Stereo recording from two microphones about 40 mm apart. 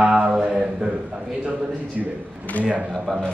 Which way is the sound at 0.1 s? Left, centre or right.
Right.